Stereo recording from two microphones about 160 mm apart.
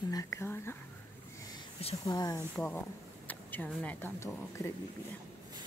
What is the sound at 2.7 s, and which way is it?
Speech, 10° left (ahead or behind).